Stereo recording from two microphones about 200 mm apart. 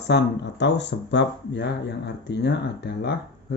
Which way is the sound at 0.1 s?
60° left (ahead or behind).